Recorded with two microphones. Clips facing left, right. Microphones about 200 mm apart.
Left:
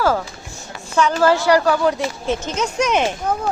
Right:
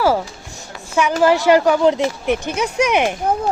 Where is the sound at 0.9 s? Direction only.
15° right (ahead or behind).